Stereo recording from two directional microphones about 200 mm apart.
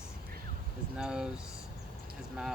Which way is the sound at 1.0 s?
5° right (ahead or behind).